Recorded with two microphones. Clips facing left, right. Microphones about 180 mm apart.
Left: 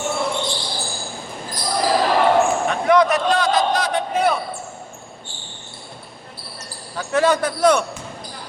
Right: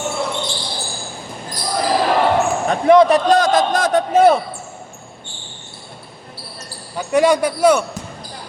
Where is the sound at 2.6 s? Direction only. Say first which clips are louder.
Right 5 dB; 25° right (ahead or behind).